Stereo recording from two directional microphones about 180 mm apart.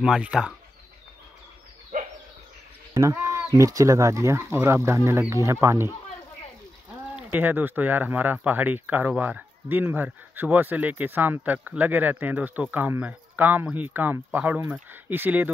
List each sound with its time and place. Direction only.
0.0 s speech: 5° right (ahead or behind)
1.9 s dog: 45° right (ahead or behind)
2.9 s speech: 15° right (ahead or behind)
7.2 s speech: 10° right (ahead or behind)